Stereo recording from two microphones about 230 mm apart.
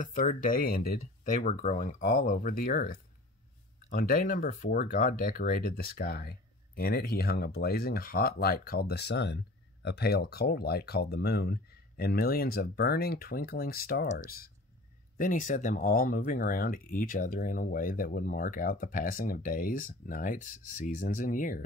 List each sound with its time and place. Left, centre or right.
0.0 s speech: left